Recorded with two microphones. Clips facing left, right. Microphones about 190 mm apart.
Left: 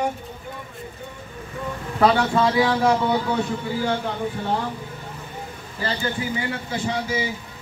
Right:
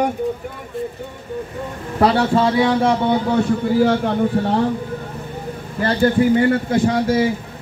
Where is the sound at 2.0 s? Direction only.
30° right (ahead or behind).